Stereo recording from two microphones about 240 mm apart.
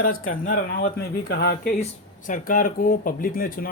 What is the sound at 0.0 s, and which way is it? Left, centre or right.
Speech, left.